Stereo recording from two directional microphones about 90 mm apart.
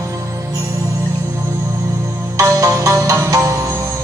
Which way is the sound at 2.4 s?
35° right (ahead or behind).